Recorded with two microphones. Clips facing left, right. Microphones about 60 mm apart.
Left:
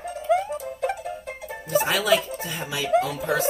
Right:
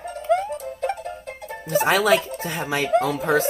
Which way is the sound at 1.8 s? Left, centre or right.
Right.